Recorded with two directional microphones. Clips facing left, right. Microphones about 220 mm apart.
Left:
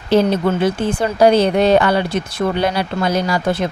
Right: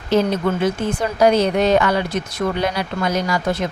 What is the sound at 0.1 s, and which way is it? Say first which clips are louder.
A woman's voice: left 3 dB; 30° left (ahead or behind).